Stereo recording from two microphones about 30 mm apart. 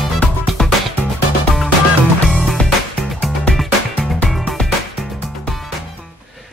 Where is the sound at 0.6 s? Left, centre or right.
Left.